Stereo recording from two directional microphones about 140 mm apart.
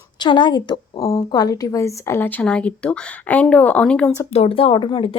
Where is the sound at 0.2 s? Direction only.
35° left (ahead or behind); by 4.1 s 10° left (ahead or behind).